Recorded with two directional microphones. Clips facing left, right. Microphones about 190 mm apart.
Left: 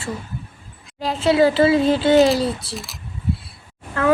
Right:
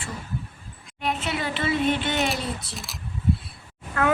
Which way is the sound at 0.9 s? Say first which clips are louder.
Left 3 dB; 35° left (ahead or behind).